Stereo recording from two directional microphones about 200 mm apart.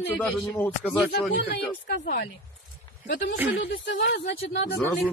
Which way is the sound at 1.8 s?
50° left (ahead or behind).